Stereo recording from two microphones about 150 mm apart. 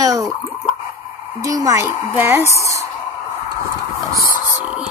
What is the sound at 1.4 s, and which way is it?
A woman's voice, 20° right (ahead or behind).